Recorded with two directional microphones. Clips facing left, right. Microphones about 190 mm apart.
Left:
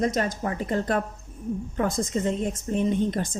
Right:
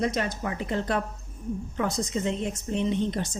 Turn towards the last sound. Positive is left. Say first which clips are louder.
# left 2 dB
turn(degrees=50)  # may be behind; listen again after turning